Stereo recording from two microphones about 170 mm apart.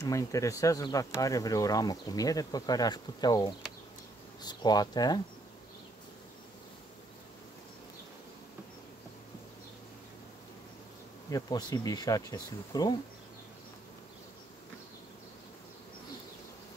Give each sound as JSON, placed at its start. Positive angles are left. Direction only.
{"t": 0.0, "sound": "speech", "side_deg": 20}
{"t": 11.2, "sound": "speech", "side_deg": 20}